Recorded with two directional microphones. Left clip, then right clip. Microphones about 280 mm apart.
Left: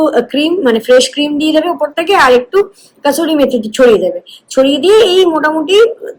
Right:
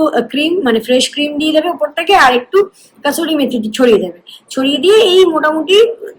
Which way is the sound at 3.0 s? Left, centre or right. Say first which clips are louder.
Left 3 dB; right.